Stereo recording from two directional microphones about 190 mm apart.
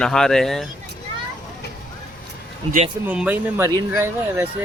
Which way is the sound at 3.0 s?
10° right (ahead or behind).